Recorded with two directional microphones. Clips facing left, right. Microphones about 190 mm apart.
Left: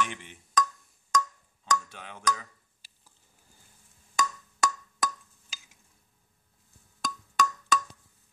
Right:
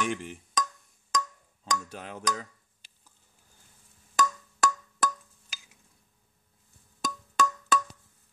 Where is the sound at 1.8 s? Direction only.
40° right (ahead or behind).